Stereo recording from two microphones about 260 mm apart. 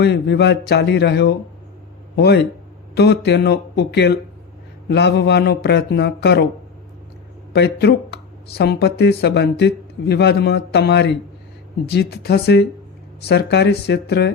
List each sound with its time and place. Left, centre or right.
0.0 s speech: left
7.5 s speech: left